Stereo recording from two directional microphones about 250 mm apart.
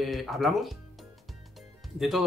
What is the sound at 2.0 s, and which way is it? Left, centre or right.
Speech, centre.